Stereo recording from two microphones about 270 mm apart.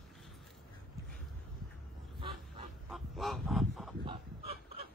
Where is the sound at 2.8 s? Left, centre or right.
Centre.